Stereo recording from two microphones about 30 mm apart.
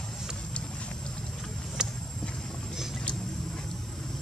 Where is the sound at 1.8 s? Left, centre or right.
Right.